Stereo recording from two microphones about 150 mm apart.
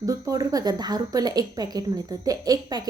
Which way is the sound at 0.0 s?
25° right (ahead or behind).